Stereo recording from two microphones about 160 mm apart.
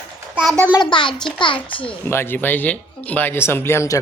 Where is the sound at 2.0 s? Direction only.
15° left (ahead or behind).